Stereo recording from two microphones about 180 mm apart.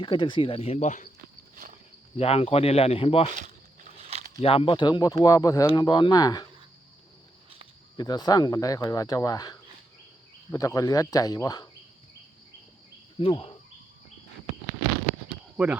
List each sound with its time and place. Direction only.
0.0 s speech: 25° left (ahead or behind); by 1.1 s 40° left (ahead or behind)
2.1 s speech: 35° left (ahead or behind)
3.3 s a sound: 40° right (ahead or behind)
4.4 s speech: 30° left (ahead or behind)
7.9 s speech: 20° left (ahead or behind)
13.1 s speech: 30° left (ahead or behind)
15.5 s speech: 5° right (ahead or behind)